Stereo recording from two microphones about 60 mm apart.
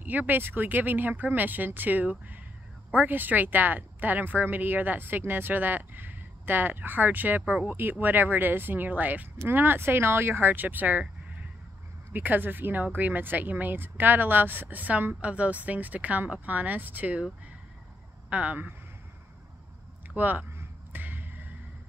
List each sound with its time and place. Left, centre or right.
0.0 s speech: right
12.1 s speech: right
18.3 s speech: right
20.2 s speech: right
20.5 s music: right